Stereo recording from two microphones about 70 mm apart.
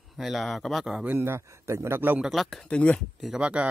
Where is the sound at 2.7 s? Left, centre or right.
Centre.